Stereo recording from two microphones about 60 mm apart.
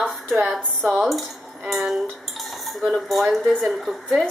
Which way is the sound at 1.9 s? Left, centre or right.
Centre.